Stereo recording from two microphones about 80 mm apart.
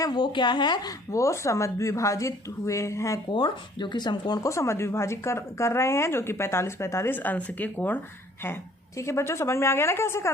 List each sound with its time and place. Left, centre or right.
0.0 s speech: left
1.1 s a woman's voice: left
3.3 s speech: left
4.4 s a woman's voice: left
9.0 s a woman's voice: left